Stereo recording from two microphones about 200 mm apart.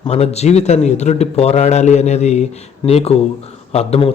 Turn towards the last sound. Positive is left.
turn(degrees=30)  # may be behind; listen again after turning